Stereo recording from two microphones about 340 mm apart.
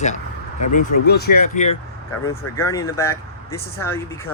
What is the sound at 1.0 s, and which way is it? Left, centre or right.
Speech, left.